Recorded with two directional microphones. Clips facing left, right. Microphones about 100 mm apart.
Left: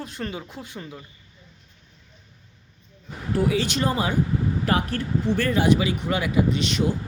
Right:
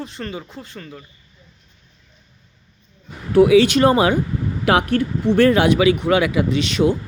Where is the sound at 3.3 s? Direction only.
80° right.